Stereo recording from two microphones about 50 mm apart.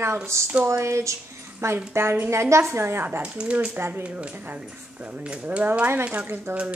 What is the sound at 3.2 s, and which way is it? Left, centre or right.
Speech, right.